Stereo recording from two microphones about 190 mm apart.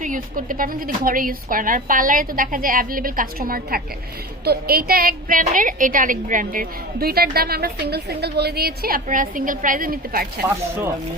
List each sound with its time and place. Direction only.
0.0 s a woman's voice: 45° right (ahead or behind)